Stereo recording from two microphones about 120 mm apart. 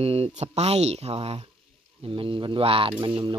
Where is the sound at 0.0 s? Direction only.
55° right (ahead or behind).